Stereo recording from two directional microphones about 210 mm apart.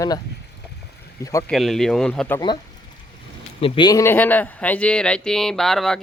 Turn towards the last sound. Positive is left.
turn(degrees=0)  # may be behind; listen again after turning